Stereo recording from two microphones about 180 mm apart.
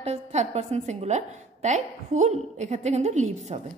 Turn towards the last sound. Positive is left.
turn(degrees=-40)  # may be behind; listen again after turning